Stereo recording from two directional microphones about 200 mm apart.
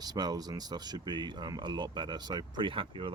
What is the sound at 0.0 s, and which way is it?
Speech, 20° right (ahead or behind).